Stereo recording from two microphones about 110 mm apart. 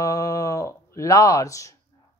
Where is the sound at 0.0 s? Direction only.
30° left (ahead or behind).